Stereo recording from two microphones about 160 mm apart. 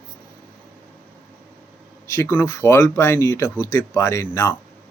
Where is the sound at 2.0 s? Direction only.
15° left (ahead or behind).